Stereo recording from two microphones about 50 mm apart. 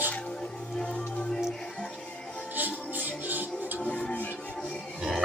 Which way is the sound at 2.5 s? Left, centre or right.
Right.